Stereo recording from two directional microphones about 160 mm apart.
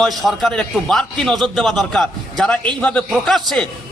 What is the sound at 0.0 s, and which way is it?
A man's voice, centre (ahead or behind).